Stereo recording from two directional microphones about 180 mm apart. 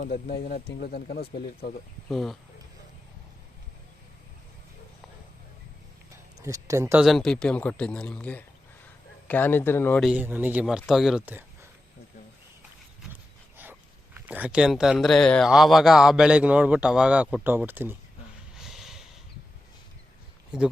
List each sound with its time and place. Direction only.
0.4 s speech: 55° left (ahead or behind)
2.0 s speech: centre (ahead or behind)
6.4 s speech: 15° right (ahead or behind)
7.0 s a man's voice: centre (ahead or behind)
10.0 s speech: 5° right (ahead or behind)
13.6 s speech: 10° right (ahead or behind)
18.5 s a sound: centre (ahead or behind)